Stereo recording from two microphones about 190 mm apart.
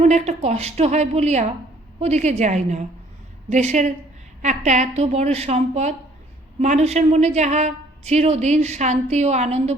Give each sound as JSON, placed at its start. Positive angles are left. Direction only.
{"t": 0.0, "sound": "a woman's voice", "side_deg": -35}